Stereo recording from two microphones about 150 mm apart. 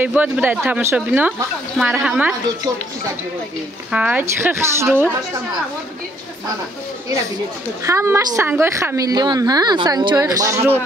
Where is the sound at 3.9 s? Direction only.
5° right (ahead or behind).